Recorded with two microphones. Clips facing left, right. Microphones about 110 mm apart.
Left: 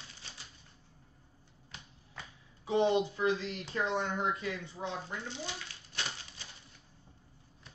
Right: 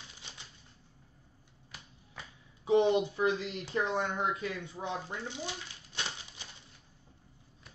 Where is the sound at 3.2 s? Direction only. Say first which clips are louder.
Right 1 dB; 25° right (ahead or behind).